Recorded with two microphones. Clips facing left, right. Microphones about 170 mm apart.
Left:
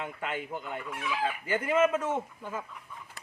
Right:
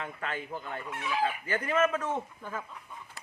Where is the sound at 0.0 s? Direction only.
10° left (ahead or behind).